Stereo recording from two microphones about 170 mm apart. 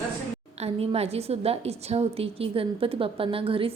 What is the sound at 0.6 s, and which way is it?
A woman's voice, 35° right (ahead or behind).